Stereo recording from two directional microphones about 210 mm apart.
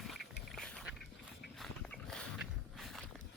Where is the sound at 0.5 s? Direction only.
5° left (ahead or behind).